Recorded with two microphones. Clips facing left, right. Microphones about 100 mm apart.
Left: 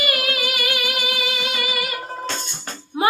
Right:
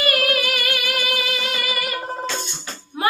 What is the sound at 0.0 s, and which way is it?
Music, 20° left (ahead or behind).